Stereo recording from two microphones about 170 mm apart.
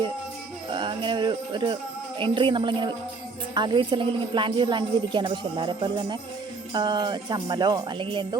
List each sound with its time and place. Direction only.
0.7 s a woman's voice: 30° right (ahead or behind)